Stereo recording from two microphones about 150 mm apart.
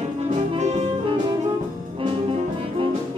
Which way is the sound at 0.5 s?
50° right (ahead or behind).